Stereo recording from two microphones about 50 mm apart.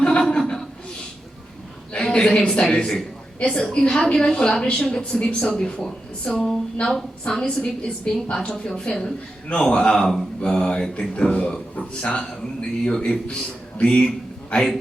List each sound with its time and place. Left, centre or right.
0.2 s chuckle: centre
1.9 s a man's voice: centre